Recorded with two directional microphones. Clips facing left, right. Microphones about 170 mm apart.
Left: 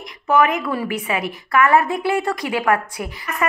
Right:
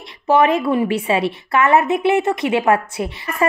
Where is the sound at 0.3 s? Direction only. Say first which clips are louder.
Right 3 dB; 30° right (ahead or behind).